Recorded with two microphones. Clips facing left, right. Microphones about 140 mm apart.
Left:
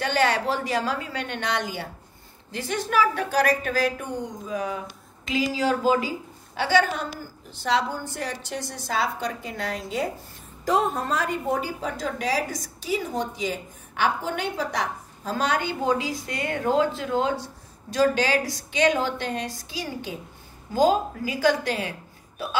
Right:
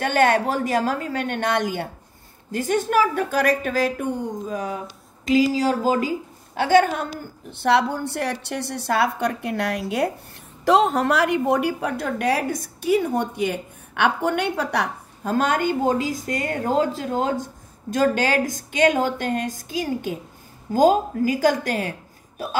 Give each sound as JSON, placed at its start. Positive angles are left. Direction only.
{"t": 0.0, "sound": "a woman's voice", "side_deg": -50}
{"t": 7.5, "sound": "a woman's voice", "side_deg": -65}
{"t": 10.6, "sound": "a woman's voice", "side_deg": -85}